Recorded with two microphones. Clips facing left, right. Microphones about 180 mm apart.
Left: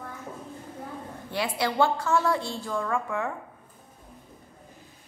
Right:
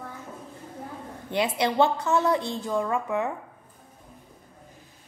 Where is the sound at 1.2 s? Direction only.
20° right (ahead or behind).